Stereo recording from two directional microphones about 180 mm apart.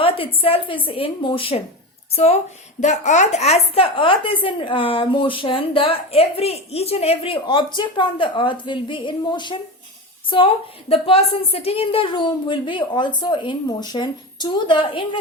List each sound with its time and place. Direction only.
0.0 s a woman's voice: 30° left (ahead or behind)